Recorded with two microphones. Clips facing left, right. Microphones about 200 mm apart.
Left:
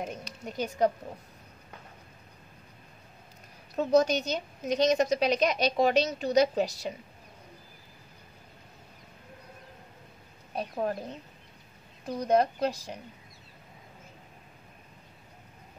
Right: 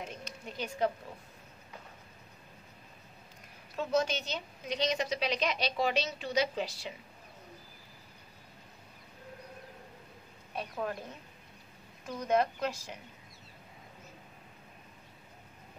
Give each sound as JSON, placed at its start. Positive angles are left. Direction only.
{"t": 0.0, "sound": "a sound", "side_deg": 45}
{"t": 3.7, "sound": "a woman's voice", "side_deg": 40}
{"t": 10.5, "sound": "speech", "side_deg": 40}
{"t": 12.1, "sound": "speech", "side_deg": 35}